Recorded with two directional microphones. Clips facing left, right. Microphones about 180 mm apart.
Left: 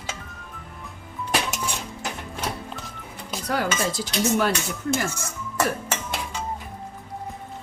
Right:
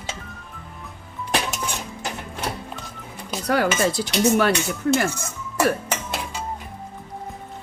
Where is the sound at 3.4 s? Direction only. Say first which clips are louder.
Right 5 dB; 70° right (ahead or behind).